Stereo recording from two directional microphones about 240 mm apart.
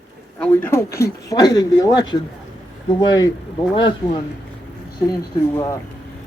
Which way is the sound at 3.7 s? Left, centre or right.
Left.